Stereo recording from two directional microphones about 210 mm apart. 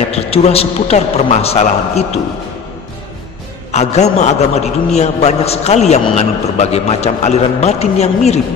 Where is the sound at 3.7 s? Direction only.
30° left (ahead or behind).